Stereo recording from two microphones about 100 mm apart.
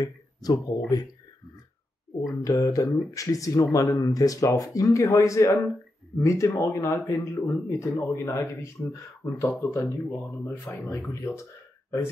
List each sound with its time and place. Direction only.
0.0 s speech: 40° left (ahead or behind)
2.4 s speech: 35° left (ahead or behind)